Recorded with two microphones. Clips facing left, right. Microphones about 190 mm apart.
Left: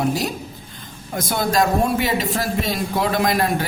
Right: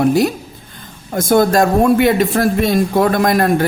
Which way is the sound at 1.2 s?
50° right (ahead or behind).